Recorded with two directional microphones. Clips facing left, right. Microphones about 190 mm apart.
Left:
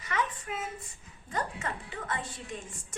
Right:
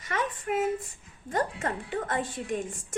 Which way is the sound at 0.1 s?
50° right (ahead or behind).